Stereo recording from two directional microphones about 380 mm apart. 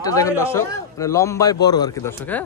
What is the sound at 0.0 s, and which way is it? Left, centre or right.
A man's voice, centre.